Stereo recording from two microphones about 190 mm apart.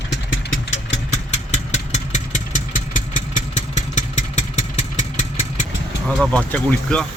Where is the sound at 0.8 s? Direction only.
35° left (ahead or behind).